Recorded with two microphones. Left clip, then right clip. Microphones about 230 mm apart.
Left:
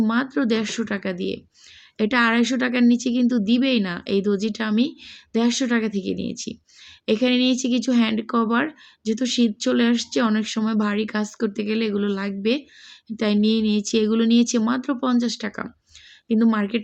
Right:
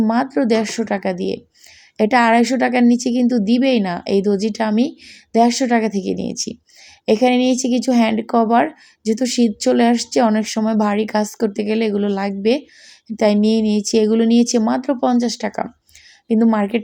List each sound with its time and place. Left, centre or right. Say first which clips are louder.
0.0 s speech: right 5 dB; centre
7.1 s speech: right 5 dB; centre
13.4 s a woman's voice: right 4 dB; left
14.0 s speech: right 5 dB; centre